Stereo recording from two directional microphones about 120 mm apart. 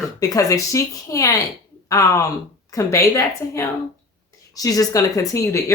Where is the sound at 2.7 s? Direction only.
25° left (ahead or behind).